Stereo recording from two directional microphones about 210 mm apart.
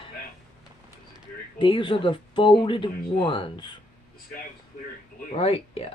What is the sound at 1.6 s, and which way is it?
Speech, 25° left (ahead or behind).